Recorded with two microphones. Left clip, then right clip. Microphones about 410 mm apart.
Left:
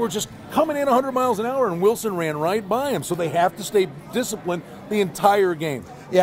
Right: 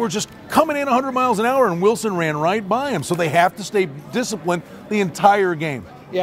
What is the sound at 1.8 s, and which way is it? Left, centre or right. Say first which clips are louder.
Speech: right 2 dB; right.